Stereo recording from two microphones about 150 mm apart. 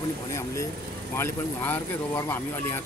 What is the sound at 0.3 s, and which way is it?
A man's voice, 20° left (ahead or behind).